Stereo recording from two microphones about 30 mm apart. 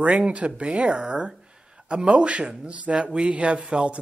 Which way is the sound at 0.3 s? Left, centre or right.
Right.